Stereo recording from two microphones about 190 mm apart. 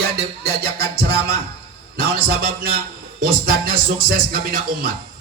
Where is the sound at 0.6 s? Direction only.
55° right (ahead or behind).